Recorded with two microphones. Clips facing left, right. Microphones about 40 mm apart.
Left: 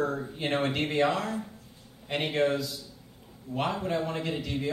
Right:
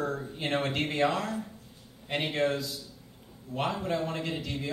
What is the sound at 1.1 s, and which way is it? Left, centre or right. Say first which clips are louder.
Speech: left 2 dB; left.